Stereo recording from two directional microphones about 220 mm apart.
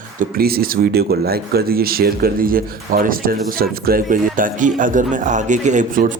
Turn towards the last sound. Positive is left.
turn(degrees=-35)  # may be behind; listen again after turning